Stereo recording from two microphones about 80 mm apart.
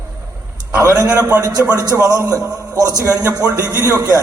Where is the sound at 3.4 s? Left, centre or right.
Right.